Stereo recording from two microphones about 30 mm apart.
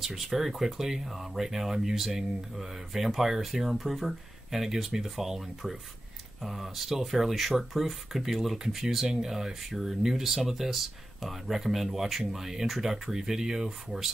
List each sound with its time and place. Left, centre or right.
0.0 s speech: centre